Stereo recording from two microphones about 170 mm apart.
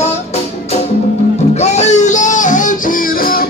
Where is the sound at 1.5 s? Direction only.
40° left (ahead or behind).